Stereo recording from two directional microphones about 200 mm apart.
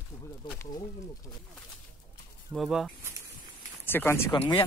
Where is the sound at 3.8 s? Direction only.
10° left (ahead or behind).